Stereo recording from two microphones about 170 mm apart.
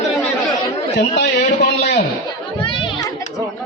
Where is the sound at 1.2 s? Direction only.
70° left (ahead or behind).